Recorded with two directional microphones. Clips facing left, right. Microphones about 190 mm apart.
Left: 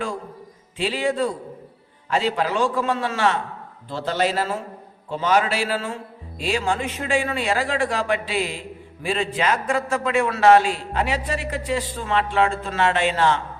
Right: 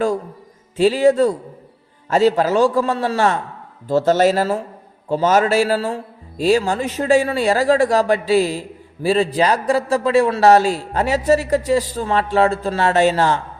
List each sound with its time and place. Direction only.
0.8 s a man's voice: 40° right (ahead or behind)